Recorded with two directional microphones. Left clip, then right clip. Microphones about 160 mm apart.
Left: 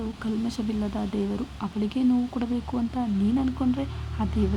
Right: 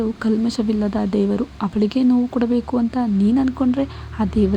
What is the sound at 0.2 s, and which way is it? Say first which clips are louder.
A woman's voice: right 10 dB; 35° right (ahead or behind).